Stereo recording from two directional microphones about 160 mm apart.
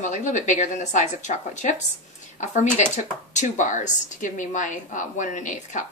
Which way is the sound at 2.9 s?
50° left (ahead or behind).